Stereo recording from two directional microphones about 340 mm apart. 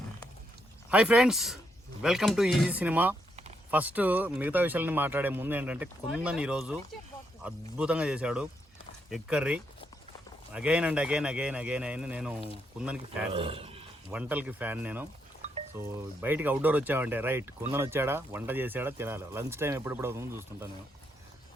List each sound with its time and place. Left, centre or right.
0.9 s speech: centre
13.3 s speech: centre
14.1 s speech: centre